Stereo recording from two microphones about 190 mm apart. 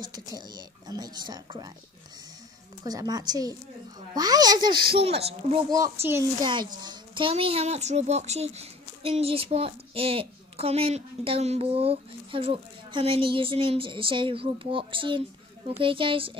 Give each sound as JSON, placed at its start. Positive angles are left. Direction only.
{"t": 0.0, "sound": "speech", "side_deg": -20}
{"t": 2.8, "sound": "speech", "side_deg": -20}